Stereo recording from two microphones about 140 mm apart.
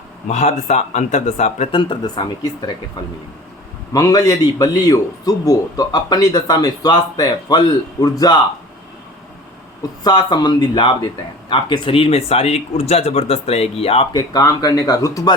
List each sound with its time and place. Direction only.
0.3 s speech: 55° left (ahead or behind)
1.7 s speech: 35° left (ahead or behind)
3.9 s a man's voice: 25° left (ahead or behind)
10.0 s speech: 30° left (ahead or behind)
14.1 s a man's voice: 30° left (ahead or behind)